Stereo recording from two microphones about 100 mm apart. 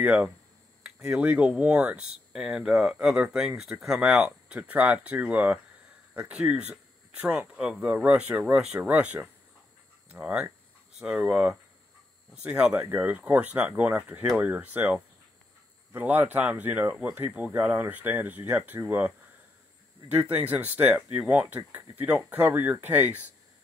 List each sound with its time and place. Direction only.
0.0 s speech: 10° right (ahead or behind)
4.6 s speech: 15° right (ahead or behind)